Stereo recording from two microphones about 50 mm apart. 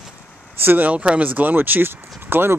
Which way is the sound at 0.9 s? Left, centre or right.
Right.